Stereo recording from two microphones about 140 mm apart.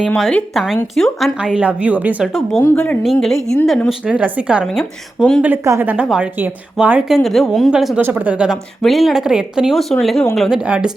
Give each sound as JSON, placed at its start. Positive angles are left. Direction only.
{"t": 0.1, "sound": "speech", "side_deg": 10}
{"t": 3.8, "sound": "speech", "side_deg": -10}
{"t": 5.5, "sound": "speech", "side_deg": -15}